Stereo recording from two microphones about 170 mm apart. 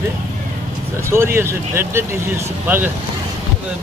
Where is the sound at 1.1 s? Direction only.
15° right (ahead or behind).